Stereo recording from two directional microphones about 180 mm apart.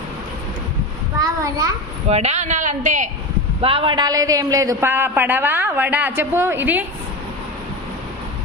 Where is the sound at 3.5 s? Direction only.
30° right (ahead or behind); by 6.8 s 10° right (ahead or behind).